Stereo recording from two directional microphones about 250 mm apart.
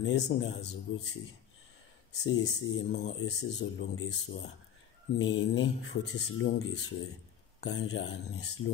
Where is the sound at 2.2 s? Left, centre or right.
Left.